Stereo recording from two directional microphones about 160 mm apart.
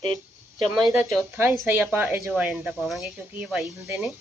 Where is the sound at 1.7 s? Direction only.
10° right (ahead or behind).